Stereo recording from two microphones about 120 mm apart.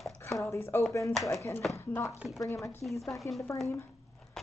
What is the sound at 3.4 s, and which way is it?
Speech, 25° left (ahead or behind).